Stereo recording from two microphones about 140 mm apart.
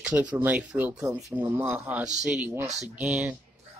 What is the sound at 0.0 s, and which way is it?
Speech, 10° right (ahead or behind).